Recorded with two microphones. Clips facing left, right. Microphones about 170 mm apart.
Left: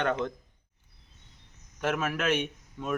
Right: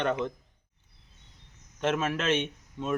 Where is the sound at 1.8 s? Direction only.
25° right (ahead or behind).